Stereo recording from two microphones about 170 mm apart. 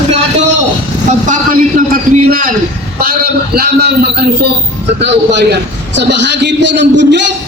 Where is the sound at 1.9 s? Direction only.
55° right (ahead or behind).